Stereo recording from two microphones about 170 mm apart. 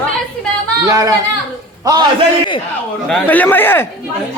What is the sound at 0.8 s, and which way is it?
Speech, 20° right (ahead or behind).